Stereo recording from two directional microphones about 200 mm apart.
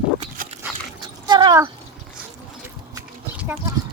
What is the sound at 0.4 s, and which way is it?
Dog, 45° right (ahead or behind).